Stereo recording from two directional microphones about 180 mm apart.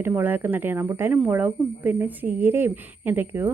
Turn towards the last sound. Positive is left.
turn(degrees=-10)  # may be behind; listen again after turning